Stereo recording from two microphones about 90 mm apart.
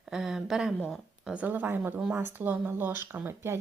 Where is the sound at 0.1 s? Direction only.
5° right (ahead or behind).